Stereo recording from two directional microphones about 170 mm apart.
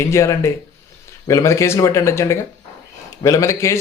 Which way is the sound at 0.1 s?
15° left (ahead or behind).